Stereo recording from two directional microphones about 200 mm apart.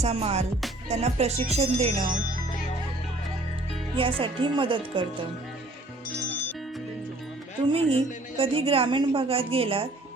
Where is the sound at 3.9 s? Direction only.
25° right (ahead or behind).